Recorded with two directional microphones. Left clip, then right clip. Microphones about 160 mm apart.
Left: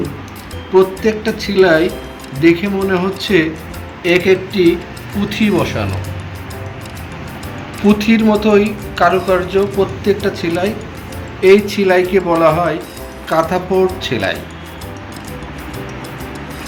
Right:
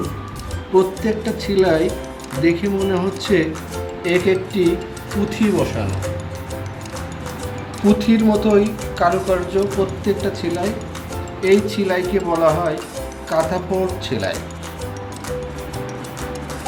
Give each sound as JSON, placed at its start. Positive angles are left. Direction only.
{"t": 0.8, "sound": "speech", "side_deg": -5}
{"t": 7.9, "sound": "speech", "side_deg": 0}